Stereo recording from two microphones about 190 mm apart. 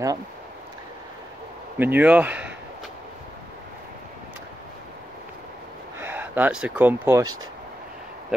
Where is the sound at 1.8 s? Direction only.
10° right (ahead or behind).